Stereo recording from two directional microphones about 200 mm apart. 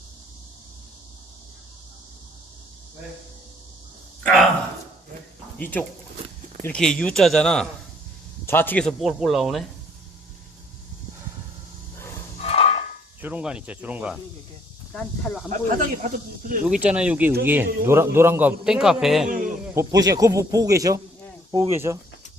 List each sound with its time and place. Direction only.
4.2 s a sound: centre (ahead or behind)
5.5 s speech: 10° left (ahead or behind)
12.4 s a sound: 30° left (ahead or behind)
13.2 s speech: 5° right (ahead or behind)
15.4 s speech: 40° right (ahead or behind)
16.6 s speech: 5° right (ahead or behind)
19.7 s speech: 15° right (ahead or behind)